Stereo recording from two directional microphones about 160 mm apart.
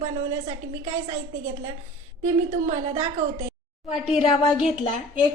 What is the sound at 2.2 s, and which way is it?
A woman's voice, 45° right (ahead or behind).